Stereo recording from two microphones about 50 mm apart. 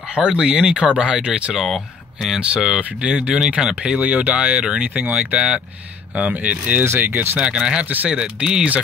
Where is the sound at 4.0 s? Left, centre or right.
Right.